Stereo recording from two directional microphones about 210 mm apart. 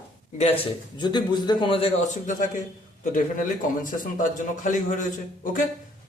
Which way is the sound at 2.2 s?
35° left (ahead or behind).